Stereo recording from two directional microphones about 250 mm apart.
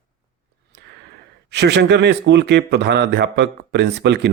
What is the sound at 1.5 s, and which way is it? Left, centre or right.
Speech, right.